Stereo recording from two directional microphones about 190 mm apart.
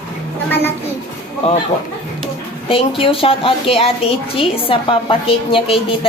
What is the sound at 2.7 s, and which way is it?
A woman's voice, 30° left (ahead or behind).